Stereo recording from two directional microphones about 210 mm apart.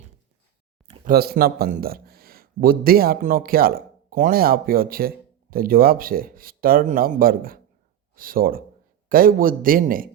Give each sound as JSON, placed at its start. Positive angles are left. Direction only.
{"t": 0.9, "sound": "a man's voice", "side_deg": -45}